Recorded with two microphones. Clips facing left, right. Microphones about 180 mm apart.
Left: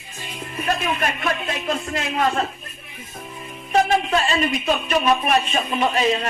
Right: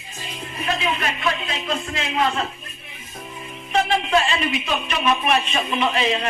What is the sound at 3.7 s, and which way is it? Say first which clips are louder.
A man's voice: left 1 dB; 45° left (ahead or behind).